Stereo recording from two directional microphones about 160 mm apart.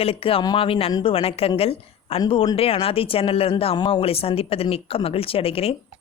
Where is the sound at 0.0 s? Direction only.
35° left (ahead or behind).